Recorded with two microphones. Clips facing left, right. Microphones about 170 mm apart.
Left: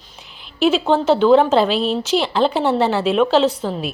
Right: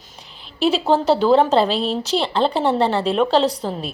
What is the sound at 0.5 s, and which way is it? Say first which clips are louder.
Speech: left 2 dB; 35° right (ahead or behind).